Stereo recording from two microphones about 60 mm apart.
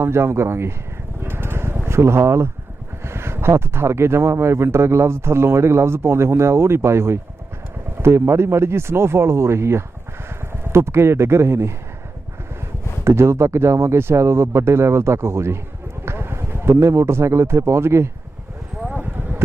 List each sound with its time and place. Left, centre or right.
0.0 s speech: right
1.2 s sheep: right
3.0 s speech: right
13.1 s speech: right
18.9 s a sound: right